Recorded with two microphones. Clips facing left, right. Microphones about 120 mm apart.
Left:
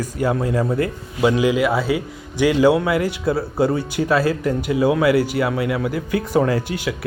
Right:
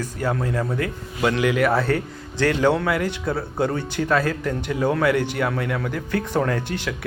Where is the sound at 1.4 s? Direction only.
20° left (ahead or behind).